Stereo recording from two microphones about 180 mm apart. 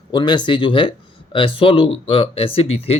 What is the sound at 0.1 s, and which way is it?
Speech, 25° left (ahead or behind).